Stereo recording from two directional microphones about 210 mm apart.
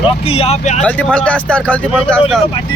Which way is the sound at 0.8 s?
5° left (ahead or behind).